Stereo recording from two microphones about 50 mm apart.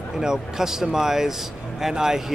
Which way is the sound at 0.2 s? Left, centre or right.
Centre.